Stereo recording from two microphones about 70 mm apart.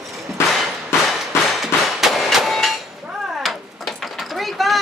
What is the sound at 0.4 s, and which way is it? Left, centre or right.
Whip, left.